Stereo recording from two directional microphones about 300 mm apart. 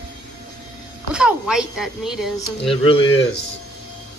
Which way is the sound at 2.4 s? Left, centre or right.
Centre.